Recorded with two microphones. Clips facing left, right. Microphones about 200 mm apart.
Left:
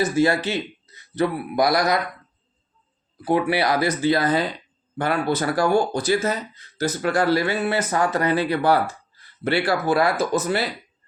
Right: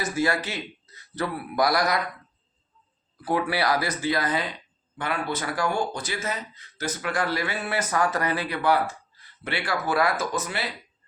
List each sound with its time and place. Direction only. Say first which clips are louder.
0.0 s speech: left 6 dB; 25° left (ahead or behind)
3.2 s speech: left 4 dB; 20° left (ahead or behind)